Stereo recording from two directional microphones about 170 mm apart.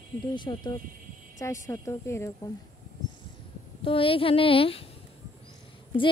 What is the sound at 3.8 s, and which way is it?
Speech, 30° left (ahead or behind).